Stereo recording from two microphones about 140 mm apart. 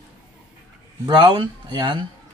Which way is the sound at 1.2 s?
35° right (ahead or behind).